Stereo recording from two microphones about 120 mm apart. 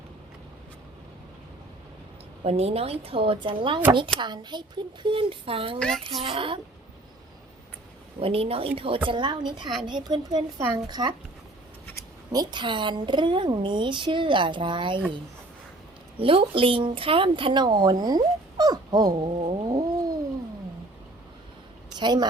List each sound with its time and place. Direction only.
2.4 s a woman's voice: 55° right (ahead or behind)
5.8 s speech: 5° left (ahead or behind)
6.2 s speech: 45° right (ahead or behind)
8.2 s a woman's voice: 50° right (ahead or behind); by 11.1 s 35° right (ahead or behind)
12.3 s a woman's voice: 35° right (ahead or behind)
16.1 s speech: 50° right (ahead or behind)
21.9 s speech: 40° right (ahead or behind)